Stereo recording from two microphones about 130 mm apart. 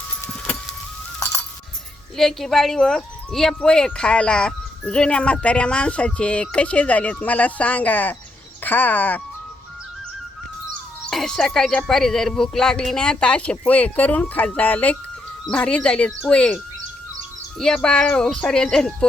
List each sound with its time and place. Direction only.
1.2 s music: 20° left (ahead or behind)
2.1 s speech: centre (ahead or behind)
11.1 s speech: 5° left (ahead or behind)
17.8 s speech: 10° left (ahead or behind)